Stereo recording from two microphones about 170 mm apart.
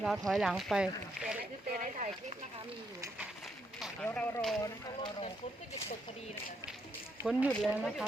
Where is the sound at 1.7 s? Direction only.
50° right (ahead or behind).